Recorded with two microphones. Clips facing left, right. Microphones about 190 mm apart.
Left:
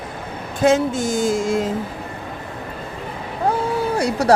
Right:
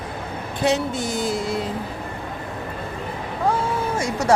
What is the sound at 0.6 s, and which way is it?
A woman's voice, 45° left (ahead or behind).